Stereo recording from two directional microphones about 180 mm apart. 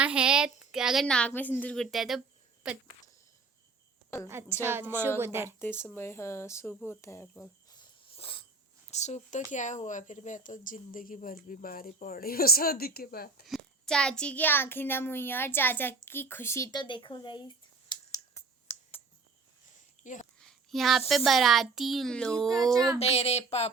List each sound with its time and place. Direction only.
0.0 s a woman's voice: 5° right (ahead or behind)
4.3 s a woman's voice: 15° right (ahead or behind)
5.5 s a child's voice: 10° left (ahead or behind)
7.0 s cricket: 15° left (ahead or behind); by 8.4 s 30° left (ahead or behind)
8.9 s speech: 40° left (ahead or behind); by 13.4 s 60° left (ahead or behind)
13.4 s a child's voice: centre (ahead or behind)
16.8 s speech: 25° left (ahead or behind)
17.8 s computer keyboard: 20° left (ahead or behind)
20.0 s speech: 45° left (ahead or behind)
20.4 s a sound: centre (ahead or behind)
21.2 s a woman's voice: centre (ahead or behind)
23.0 s speech: 35° left (ahead or behind)